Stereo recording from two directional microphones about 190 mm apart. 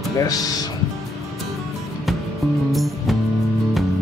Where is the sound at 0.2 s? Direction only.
20° left (ahead or behind).